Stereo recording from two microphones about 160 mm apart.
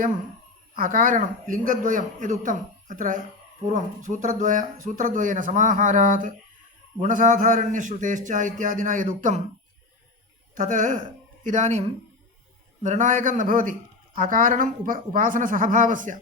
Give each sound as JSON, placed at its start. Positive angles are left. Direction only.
{"t": 0.8, "sound": "speech", "side_deg": -60}
{"t": 10.5, "sound": "a woman's voice", "side_deg": -55}
{"t": 12.8, "sound": "a woman's voice", "side_deg": -50}